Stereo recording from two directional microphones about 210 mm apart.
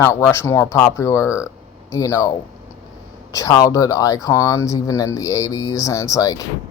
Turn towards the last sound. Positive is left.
turn(degrees=15)  # may be behind; listen again after turning